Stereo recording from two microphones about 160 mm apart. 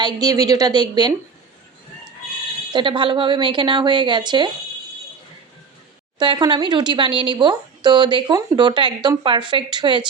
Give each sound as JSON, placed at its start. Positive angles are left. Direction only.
{"t": 0.0, "sound": "speech", "side_deg": -25}
{"t": 2.7, "sound": "a woman's voice", "side_deg": -30}
{"t": 6.1, "sound": "speech", "side_deg": -30}